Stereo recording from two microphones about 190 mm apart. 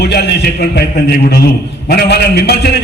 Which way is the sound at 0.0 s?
60° left (ahead or behind).